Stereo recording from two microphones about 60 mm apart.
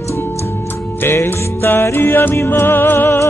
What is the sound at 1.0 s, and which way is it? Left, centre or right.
Music, left.